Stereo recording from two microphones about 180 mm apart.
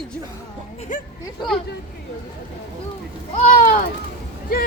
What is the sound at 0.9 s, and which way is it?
Speech, 45° left (ahead or behind).